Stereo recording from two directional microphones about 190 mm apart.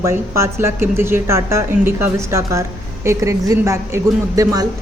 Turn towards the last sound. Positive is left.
turn(degrees=-15)  # may be behind; listen again after turning